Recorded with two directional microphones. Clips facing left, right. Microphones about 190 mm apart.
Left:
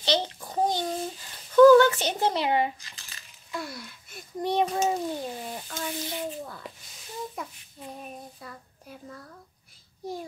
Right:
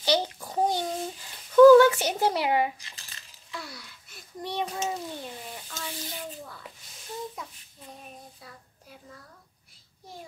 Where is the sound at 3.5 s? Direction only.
50° left (ahead or behind).